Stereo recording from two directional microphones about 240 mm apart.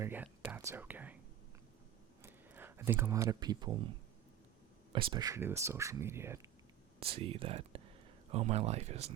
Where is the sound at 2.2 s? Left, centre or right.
Centre.